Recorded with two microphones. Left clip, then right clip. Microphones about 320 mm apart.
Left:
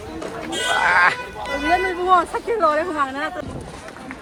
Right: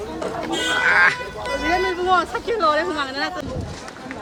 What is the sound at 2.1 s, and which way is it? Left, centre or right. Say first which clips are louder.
Speech: left 4 dB; left.